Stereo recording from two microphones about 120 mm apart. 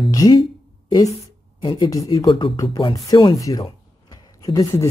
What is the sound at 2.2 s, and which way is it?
Speech, 45° left (ahead or behind).